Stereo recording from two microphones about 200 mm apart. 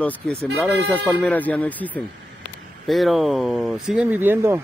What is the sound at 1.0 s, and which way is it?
Speech, 10° left (ahead or behind).